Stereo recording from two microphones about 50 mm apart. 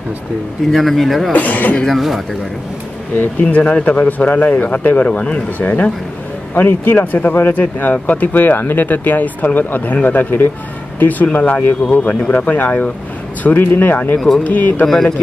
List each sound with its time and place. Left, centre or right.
0.7 s speech: centre
1.3 s speech: left
1.9 s speech: centre
3.4 s speech: left
5.6 s speech: left
7.6 s speech: left
11.0 s speech: left
11.6 s speech: left
12.1 s speech: left
14.1 s speech: centre
14.4 s speech: left